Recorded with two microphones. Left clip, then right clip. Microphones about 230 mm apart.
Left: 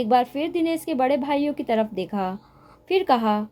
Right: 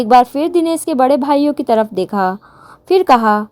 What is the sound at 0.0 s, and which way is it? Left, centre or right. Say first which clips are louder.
A woman's voice: right 10 dB; right.